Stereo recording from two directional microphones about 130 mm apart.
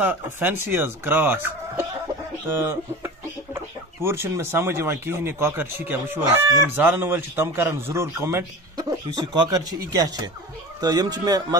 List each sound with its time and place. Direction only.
0.0 s a man's voice: 15° right (ahead or behind)
8.7 s speech: 30° right (ahead or behind)